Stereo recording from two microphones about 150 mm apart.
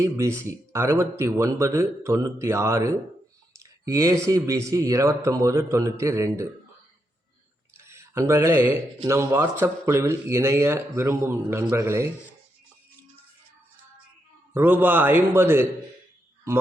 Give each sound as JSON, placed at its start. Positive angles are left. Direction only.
{"t": 0.0, "sound": "speech", "side_deg": -20}
{"t": 7.8, "sound": "speech", "side_deg": -20}
{"t": 14.5, "sound": "a man's voice", "side_deg": -15}